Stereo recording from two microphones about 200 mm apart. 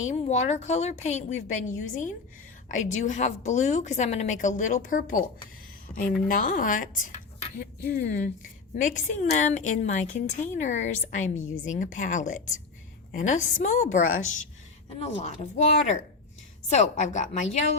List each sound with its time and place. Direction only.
0.0 s a woman's voice: 35° left (ahead or behind)